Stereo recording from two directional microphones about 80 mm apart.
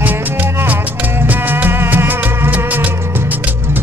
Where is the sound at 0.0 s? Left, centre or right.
Right.